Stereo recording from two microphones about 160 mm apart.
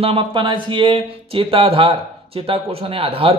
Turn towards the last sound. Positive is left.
turn(degrees=-35)  # may be behind; listen again after turning